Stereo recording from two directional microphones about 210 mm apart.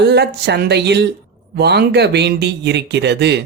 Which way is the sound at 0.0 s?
50° right (ahead or behind).